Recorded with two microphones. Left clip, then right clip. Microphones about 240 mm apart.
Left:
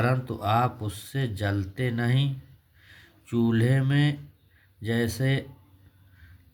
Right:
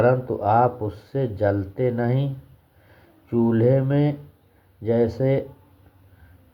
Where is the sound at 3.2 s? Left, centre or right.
Left.